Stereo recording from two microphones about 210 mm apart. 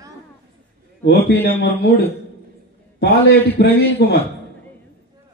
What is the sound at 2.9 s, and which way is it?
A man's voice, 50° left (ahead or behind).